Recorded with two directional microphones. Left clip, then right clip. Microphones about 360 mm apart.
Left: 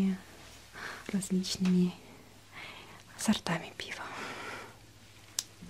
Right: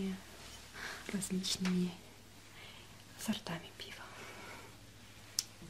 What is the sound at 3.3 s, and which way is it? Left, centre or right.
Speech, left.